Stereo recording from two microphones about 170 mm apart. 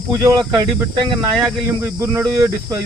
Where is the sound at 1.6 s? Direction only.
15° right (ahead or behind).